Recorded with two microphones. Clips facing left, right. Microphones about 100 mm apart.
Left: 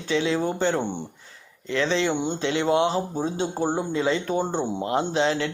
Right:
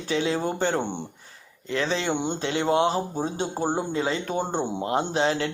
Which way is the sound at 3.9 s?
35° right (ahead or behind).